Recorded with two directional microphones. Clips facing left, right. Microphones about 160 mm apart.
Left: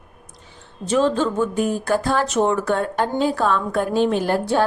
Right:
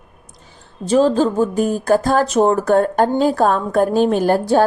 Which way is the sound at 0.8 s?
35° right (ahead or behind).